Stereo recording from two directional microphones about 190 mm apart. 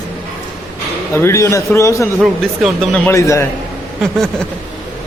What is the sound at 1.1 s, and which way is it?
Speech, 15° left (ahead or behind).